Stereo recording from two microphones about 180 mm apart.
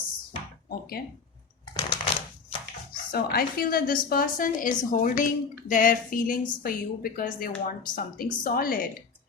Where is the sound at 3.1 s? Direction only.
55° left (ahead or behind).